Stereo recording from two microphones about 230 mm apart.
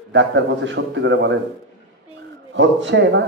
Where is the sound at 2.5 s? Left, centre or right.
Right.